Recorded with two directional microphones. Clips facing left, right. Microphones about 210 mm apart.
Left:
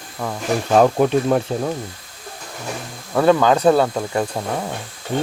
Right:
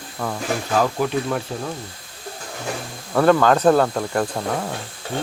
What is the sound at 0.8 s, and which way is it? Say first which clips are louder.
Speech: left 6 dB; 55° left (ahead or behind).